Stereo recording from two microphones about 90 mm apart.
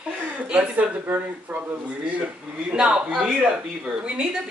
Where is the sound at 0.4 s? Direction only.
15° right (ahead or behind).